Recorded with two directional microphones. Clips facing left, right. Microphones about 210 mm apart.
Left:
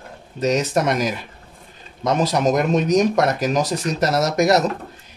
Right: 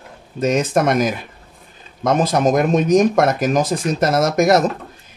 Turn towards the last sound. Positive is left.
turn(degrees=-50)  # may be behind; listen again after turning